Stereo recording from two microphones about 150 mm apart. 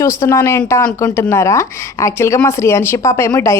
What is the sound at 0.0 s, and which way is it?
A woman's voice, 20° left (ahead or behind).